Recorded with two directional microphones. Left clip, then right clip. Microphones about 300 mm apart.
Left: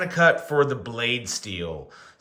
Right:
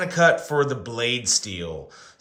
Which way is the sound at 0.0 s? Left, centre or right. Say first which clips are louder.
Right 1 dB; centre.